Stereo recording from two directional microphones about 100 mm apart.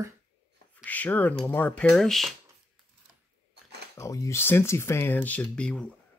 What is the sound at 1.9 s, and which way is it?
Speech, 5° left (ahead or behind).